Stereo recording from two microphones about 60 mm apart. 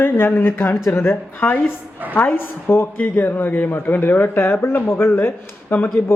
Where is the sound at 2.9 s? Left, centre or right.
Left.